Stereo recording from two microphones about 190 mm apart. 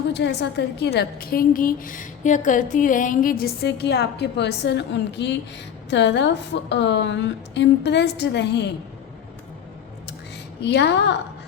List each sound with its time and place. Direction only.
0.1 s a woman's voice: 60° left (ahead or behind)
10.6 s a woman's voice: 65° left (ahead or behind)